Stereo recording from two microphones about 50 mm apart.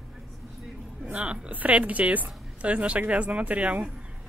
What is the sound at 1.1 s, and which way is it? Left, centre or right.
Speech, right.